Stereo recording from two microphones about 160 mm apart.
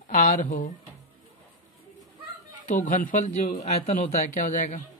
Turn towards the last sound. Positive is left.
turn(degrees=50)  # may be behind; listen again after turning